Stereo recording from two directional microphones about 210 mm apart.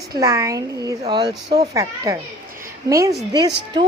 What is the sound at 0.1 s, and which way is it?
Speech, 15° right (ahead or behind).